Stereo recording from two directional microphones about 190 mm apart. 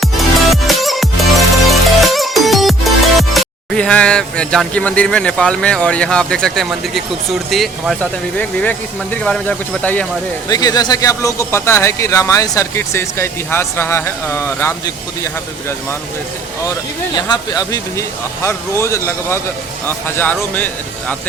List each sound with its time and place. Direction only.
0.0 s music: centre (ahead or behind)
8.4 s speech: 5° left (ahead or behind)
10.5 s speech: 20° left (ahead or behind)
17.2 s speech: 20° left (ahead or behind)